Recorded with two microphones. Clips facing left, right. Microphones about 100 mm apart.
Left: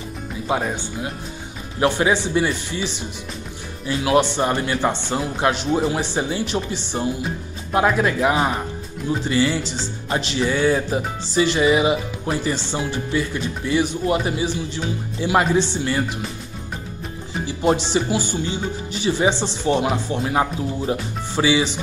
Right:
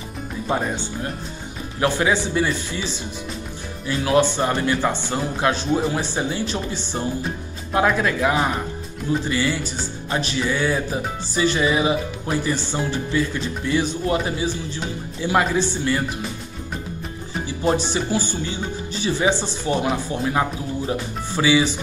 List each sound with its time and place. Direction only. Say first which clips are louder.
0.5 s speech: left 1 dB; 10° left (ahead or behind)
1.8 s speech: left 2 dB; 20° left (ahead or behind)
17.7 s speech: left 1 dB; 20° left (ahead or behind)